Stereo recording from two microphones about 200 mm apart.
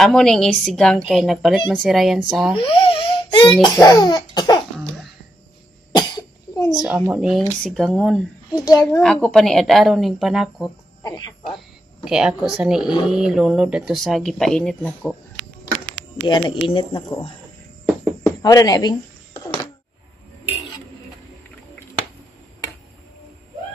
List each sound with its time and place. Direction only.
0.0 s speech: 5° left (ahead or behind)
2.5 s a child's voice: 25° left (ahead or behind)
5.9 s cough: 20° left (ahead or behind)
7.1 s speech: centre (ahead or behind)
8.5 s a child's voice: 15° left (ahead or behind)
9.0 s speech: 5° left (ahead or behind)
11.0 s speech: 20° left (ahead or behind)
12.0 s speech: 5° right (ahead or behind)
16.3 s speech: 25° left (ahead or behind)
18.2 s a sound: 15° left (ahead or behind)